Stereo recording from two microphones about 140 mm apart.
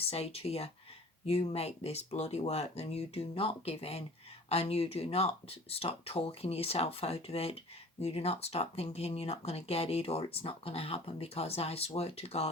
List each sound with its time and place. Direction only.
0.1 s speech: 45° left (ahead or behind)